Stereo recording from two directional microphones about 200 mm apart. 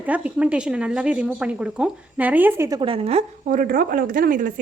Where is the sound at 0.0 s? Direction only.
5° right (ahead or behind).